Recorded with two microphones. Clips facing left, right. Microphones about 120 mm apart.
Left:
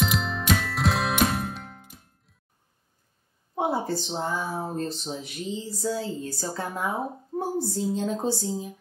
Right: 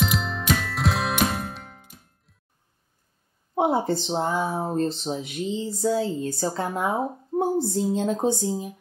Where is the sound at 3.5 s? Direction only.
25° right (ahead or behind).